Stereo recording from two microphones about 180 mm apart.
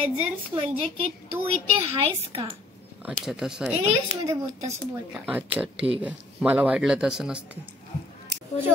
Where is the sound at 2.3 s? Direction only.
30° right (ahead or behind).